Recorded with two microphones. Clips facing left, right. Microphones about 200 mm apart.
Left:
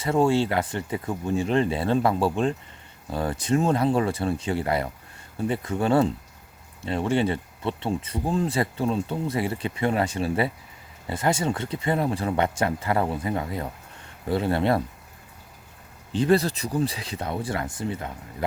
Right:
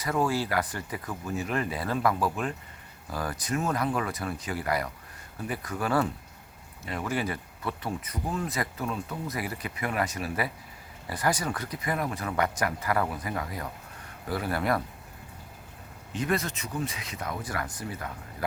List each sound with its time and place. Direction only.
0.0 s speech: 25° left (ahead or behind)
16.1 s speech: 30° left (ahead or behind)